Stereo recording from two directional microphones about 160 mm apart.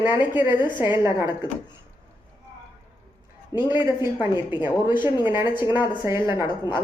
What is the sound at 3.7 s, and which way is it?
Speech, 30° left (ahead or behind).